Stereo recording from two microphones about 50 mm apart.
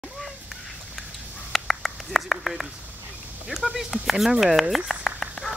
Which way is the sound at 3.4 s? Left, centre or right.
Centre.